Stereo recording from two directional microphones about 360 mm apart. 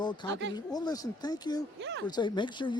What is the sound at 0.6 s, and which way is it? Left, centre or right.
Speech, centre.